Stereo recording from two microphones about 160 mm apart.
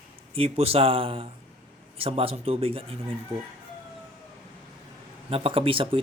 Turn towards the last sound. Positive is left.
turn(degrees=-35)  # may be behind; listen again after turning